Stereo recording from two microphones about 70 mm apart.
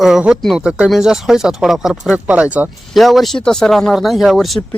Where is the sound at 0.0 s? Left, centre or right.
Centre.